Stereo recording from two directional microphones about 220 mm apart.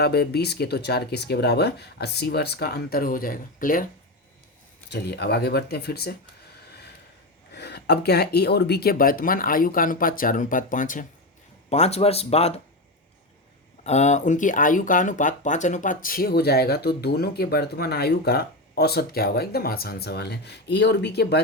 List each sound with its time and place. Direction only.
0.0 s speech: 45° left (ahead or behind)
4.9 s speech: 50° left (ahead or behind)
7.5 s speech: 50° left (ahead or behind); by 12.5 s 30° left (ahead or behind)
13.8 s speech: 30° left (ahead or behind); by 21.4 s 50° left (ahead or behind)